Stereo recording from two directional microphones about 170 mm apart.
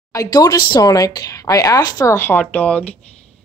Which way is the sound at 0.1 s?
20° left (ahead or behind).